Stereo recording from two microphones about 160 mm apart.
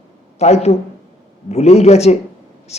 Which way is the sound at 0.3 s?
45° left (ahead or behind).